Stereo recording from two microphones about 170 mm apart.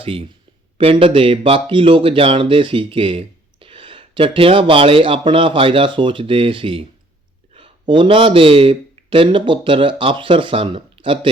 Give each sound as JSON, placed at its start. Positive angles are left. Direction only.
{"t": 0.0, "sound": "speech", "side_deg": -35}